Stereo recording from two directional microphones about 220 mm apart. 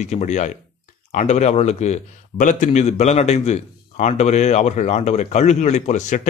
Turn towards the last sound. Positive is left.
turn(degrees=35)  # may be behind; listen again after turning